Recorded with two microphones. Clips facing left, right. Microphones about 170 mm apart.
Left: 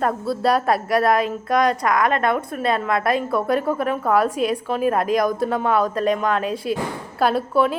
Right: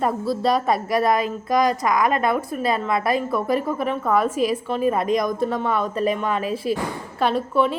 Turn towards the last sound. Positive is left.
turn(degrees=0)  # may be behind; listen again after turning